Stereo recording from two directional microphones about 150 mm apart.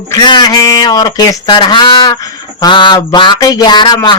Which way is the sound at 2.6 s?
30° left (ahead or behind).